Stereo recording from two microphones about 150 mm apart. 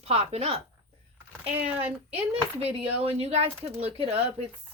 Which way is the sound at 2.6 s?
40° right (ahead or behind).